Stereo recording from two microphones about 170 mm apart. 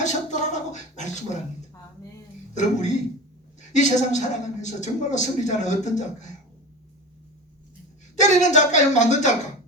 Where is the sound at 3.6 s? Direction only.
45° left (ahead or behind).